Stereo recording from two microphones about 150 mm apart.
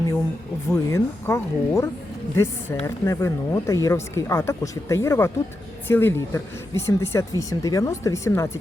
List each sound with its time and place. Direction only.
0.7 s speech: 20° left (ahead or behind)